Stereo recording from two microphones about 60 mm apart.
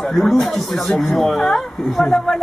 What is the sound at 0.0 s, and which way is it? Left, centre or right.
Speech, centre.